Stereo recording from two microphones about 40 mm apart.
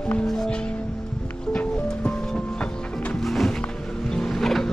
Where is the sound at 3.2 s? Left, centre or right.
Centre.